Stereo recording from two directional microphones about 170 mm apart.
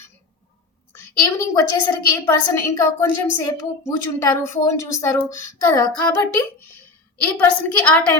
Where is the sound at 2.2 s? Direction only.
20° left (ahead or behind).